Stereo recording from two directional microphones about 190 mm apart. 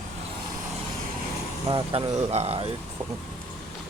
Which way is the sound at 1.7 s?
25° right (ahead or behind).